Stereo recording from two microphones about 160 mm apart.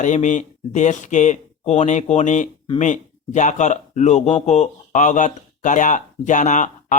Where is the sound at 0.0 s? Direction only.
50° left (ahead or behind).